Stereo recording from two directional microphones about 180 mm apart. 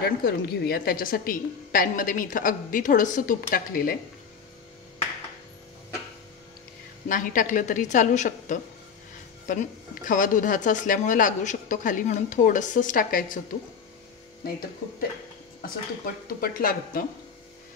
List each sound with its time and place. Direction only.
0.0 s a woman's voice: 60° left (ahead or behind)
7.1 s a woman's voice: 45° left (ahead or behind)
14.4 s speech: 55° left (ahead or behind)
16.3 s a woman's voice: 55° left (ahead or behind)